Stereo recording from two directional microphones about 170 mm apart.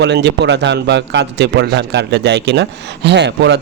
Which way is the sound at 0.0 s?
90° right.